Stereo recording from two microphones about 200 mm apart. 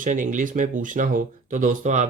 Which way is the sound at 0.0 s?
40° right (ahead or behind).